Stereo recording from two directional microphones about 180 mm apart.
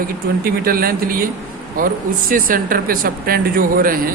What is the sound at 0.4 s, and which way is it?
A man's voice, 55° right (ahead or behind).